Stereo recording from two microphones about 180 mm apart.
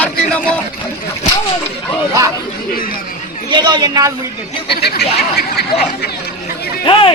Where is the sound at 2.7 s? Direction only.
50° left (ahead or behind).